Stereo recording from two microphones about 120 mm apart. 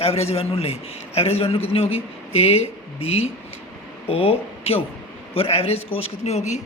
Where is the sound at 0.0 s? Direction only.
55° left (ahead or behind).